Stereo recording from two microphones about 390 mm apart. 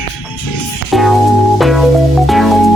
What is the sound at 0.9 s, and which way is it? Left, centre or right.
Music, centre.